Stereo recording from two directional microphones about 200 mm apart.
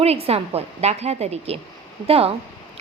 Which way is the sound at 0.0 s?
30° right (ahead or behind).